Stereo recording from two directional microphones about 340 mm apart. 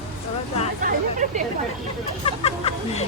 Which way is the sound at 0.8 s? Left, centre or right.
Right.